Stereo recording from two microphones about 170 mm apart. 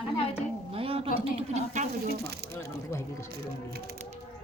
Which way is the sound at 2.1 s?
70° right (ahead or behind).